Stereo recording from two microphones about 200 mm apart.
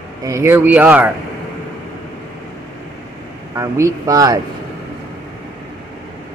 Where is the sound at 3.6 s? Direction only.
15° right (ahead or behind).